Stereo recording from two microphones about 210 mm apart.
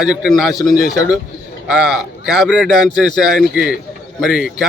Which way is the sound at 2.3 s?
Centre (ahead or behind).